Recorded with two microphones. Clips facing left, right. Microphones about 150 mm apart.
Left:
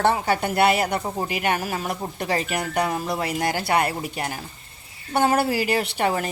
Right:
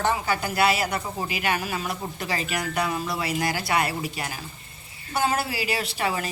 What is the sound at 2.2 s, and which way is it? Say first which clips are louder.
A woman's voice: left 5 dB; 55° left (ahead or behind).